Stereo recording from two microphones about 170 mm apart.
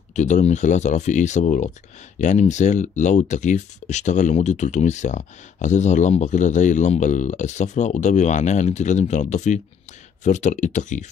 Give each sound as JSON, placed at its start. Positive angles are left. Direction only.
{"t": 0.1, "sound": "speech", "side_deg": 45}